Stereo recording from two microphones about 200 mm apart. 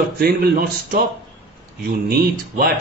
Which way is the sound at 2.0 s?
50° right (ahead or behind).